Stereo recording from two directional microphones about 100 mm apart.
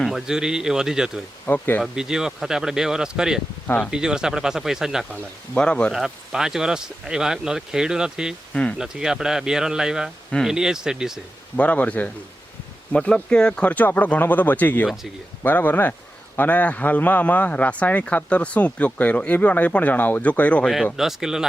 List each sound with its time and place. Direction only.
0.0 s speech: 5° right (ahead or behind)
1.5 s speech: 20° left (ahead or behind)
1.8 s speech: 5° right (ahead or behind)
5.1 s a man's voice: 10° left (ahead or behind)
5.9 s speech: 5° right (ahead or behind)
11.5 s a man's voice: 15° left (ahead or behind)
20.7 s speech: centre (ahead or behind)